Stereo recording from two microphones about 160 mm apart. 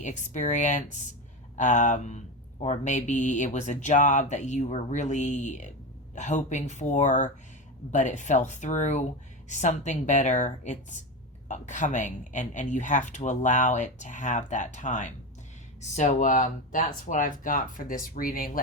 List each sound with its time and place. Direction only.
0.0 s speech: 50° left (ahead or behind)